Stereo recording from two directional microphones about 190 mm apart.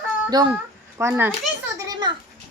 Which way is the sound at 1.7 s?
20° right (ahead or behind).